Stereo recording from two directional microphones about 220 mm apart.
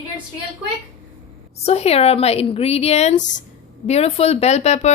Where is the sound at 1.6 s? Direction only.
30° left (ahead or behind).